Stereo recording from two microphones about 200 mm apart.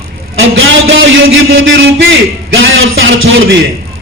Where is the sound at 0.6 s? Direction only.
70° right (ahead or behind).